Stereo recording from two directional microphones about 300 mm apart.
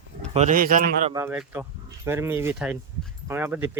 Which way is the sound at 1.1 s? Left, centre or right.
Centre.